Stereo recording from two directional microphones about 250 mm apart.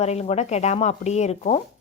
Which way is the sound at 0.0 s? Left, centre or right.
Left.